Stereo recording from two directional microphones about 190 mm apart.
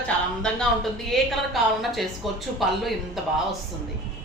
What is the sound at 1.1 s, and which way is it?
A woman's voice, centre (ahead or behind).